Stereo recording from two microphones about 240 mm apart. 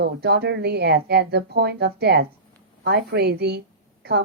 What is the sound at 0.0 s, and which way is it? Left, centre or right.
A woman's voice, right.